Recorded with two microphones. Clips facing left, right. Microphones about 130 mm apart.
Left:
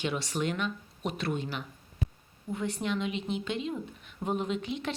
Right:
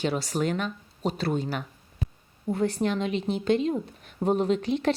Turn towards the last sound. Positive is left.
turn(degrees=-35)  # may be behind; listen again after turning